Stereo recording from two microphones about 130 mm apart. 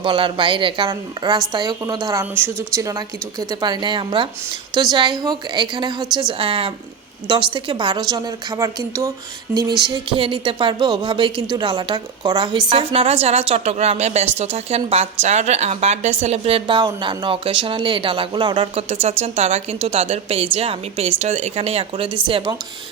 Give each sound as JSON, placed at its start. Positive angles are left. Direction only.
{"t": 0.0, "sound": "a woman's voice", "side_deg": -40}
{"t": 9.6, "sound": "a woman's voice", "side_deg": -35}